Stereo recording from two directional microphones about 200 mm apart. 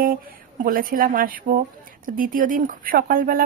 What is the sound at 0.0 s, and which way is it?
A woman's voice, 45° right (ahead or behind).